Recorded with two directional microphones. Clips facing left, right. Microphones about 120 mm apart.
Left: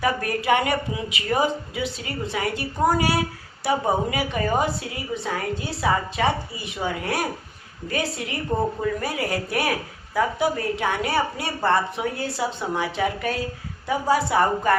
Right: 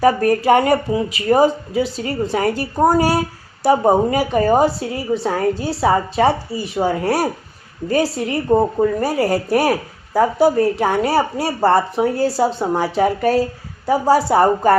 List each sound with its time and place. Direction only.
0.0 s speech: 40° right (ahead or behind)